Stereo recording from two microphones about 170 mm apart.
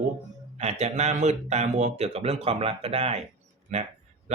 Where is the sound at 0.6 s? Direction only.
40° right (ahead or behind).